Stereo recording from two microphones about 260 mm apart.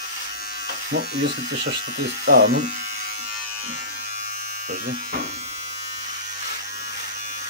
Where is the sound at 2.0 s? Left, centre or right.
Right.